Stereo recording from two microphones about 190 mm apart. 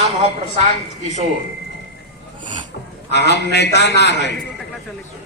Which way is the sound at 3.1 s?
60° left (ahead or behind).